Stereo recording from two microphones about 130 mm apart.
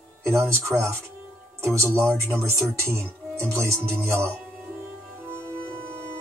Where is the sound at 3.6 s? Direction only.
20° right (ahead or behind).